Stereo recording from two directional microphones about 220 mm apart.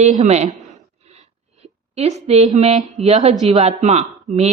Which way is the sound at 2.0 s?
30° right (ahead or behind).